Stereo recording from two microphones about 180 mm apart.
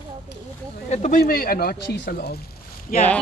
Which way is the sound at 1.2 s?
55° left (ahead or behind).